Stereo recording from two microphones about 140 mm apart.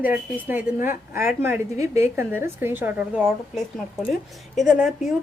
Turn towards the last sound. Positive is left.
turn(degrees=-5)  # may be behind; listen again after turning